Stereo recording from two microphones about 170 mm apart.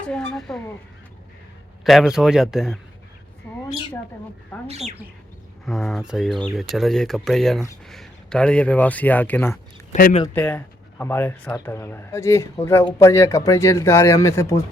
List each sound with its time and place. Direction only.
0.1 s speech: 5° left (ahead or behind)
1.8 s speech: centre (ahead or behind)
4.5 s speech: 5° left (ahead or behind)
9.9 s speech: 45° left (ahead or behind)
10.3 s speech: 10° left (ahead or behind)